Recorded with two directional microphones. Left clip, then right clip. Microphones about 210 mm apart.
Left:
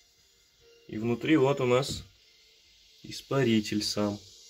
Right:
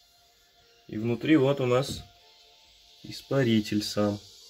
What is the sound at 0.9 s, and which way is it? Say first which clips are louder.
Speech: right 2 dB; 15° right (ahead or behind).